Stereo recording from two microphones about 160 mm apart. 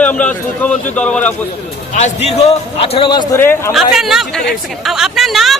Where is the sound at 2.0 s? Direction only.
45° left (ahead or behind); by 3.4 s 25° left (ahead or behind).